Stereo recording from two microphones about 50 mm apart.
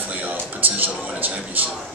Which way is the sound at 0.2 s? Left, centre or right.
Right.